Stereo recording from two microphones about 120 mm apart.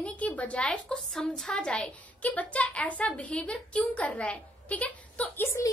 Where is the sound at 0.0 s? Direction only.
10° left (ahead or behind).